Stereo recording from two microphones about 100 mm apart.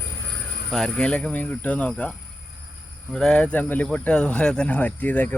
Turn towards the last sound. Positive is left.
turn(degrees=15)  # may be behind; listen again after turning